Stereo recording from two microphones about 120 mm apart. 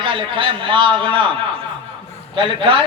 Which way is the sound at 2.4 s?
45° right (ahead or behind).